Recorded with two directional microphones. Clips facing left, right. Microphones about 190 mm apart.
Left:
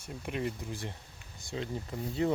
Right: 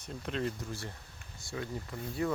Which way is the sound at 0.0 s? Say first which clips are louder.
Even; 10° left (ahead or behind).